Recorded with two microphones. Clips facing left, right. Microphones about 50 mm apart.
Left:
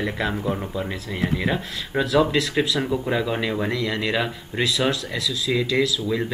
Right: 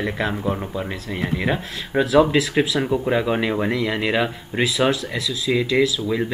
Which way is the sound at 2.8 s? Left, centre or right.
Centre.